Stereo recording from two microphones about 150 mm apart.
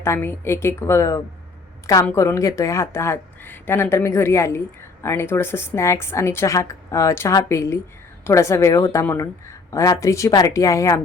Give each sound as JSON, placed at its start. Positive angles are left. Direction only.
{"t": 0.0, "sound": "a woman's voice", "side_deg": 15}